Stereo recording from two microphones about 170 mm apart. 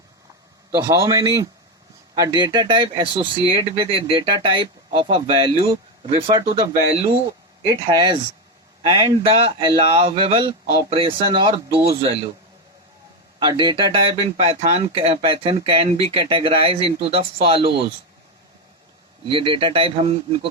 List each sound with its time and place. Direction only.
0.7 s speech: 15° right (ahead or behind); by 12.3 s 35° right (ahead or behind)
13.4 s speech: 25° right (ahead or behind)
19.2 s speech: 30° right (ahead or behind)